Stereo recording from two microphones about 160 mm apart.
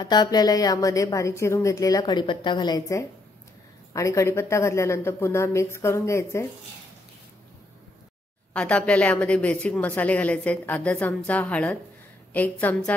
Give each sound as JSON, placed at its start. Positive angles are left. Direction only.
{"t": 0.0, "sound": "a woman's voice", "side_deg": 25}
{"t": 8.5, "sound": "a woman's voice", "side_deg": 5}